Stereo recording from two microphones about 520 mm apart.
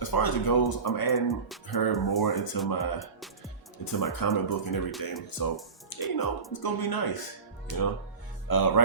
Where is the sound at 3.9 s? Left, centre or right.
Left.